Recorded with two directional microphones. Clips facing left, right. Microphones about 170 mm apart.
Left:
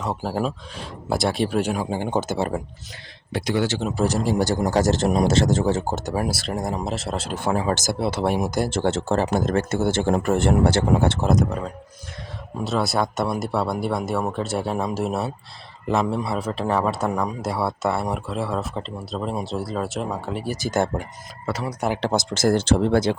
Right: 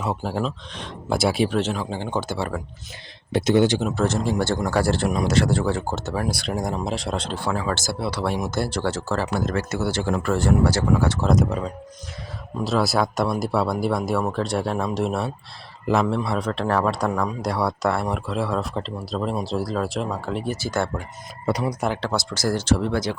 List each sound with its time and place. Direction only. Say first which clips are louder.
0.0 s speech: even; centre (ahead or behind)
1.5 s speech: left 1 dB; 15° left (ahead or behind)
3.3 s speech: right 5 dB; 20° right (ahead or behind)
3.9 s speech: left 1 dB; 10° left (ahead or behind)
4.4 s speech: left 1 dB; 40° left (ahead or behind)
4.6 s speech: left 2 dB; 20° left (ahead or behind)
5.1 s speech: left 2 dB; 30° left (ahead or behind); by 6.3 s 15° left (ahead or behind)
6.3 s speech: even; centre (ahead or behind)
7.3 s speech: left 6 dB; 20° left (ahead or behind)
11.3 s speech: even; centre (ahead or behind)
20.6 s speech: left 2 dB; 20° left (ahead or behind)
21.4 s speech: right 4 dB; 15° right (ahead or behind)
21.8 s speech: left 1 dB; 5° left (ahead or behind)
22.0 s speech: left 4 dB; 20° left (ahead or behind)